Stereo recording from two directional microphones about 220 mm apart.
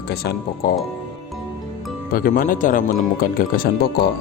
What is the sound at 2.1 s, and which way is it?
Speech, 40° left (ahead or behind).